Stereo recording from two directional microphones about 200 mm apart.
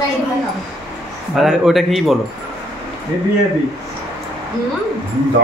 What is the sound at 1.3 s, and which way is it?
Speech, centre (ahead or behind).